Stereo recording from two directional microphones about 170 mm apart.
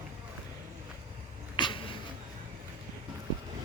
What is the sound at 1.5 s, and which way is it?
Cat, 25° left (ahead or behind).